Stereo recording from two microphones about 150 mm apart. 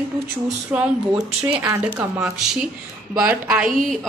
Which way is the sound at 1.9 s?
20° right (ahead or behind).